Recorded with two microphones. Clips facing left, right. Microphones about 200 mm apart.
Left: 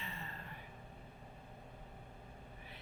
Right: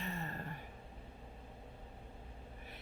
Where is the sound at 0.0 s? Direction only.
45° right (ahead or behind).